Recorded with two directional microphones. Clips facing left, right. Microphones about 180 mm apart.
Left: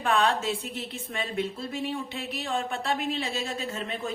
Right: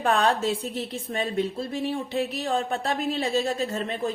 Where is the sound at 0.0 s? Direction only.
40° right (ahead or behind).